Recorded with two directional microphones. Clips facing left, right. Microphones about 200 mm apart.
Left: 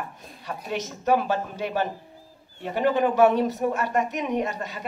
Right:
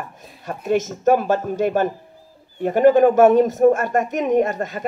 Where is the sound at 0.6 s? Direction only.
45° right (ahead or behind).